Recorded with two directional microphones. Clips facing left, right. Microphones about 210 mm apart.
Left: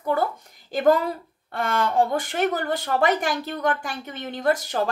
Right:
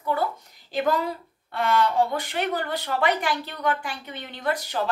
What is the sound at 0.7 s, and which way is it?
Speech, 50° left (ahead or behind).